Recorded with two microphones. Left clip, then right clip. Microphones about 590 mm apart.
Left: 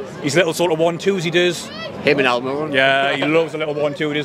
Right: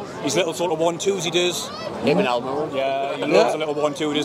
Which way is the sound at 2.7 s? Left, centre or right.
Left.